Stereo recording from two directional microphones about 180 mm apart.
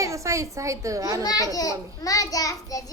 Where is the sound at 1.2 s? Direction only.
20° left (ahead or behind).